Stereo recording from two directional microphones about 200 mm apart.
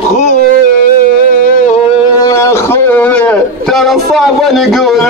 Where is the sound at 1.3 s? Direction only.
40° left (ahead or behind).